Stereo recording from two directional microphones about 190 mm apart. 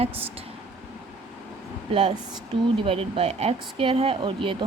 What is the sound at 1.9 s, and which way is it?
Speech, 30° right (ahead or behind).